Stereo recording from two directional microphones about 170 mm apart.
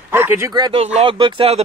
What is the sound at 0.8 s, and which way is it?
Speech, 35° right (ahead or behind).